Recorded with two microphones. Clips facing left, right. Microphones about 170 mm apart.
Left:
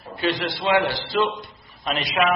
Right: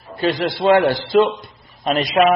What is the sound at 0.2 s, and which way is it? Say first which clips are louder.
A man's voice: right 6 dB; 40° right (ahead or behind).